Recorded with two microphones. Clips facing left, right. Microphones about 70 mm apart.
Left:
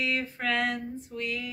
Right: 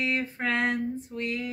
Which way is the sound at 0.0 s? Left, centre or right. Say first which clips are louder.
Right 1 dB; right.